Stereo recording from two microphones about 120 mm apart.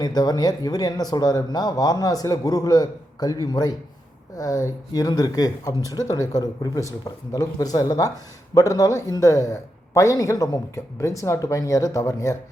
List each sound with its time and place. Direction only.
0.0 s a man's voice: 35° left (ahead or behind)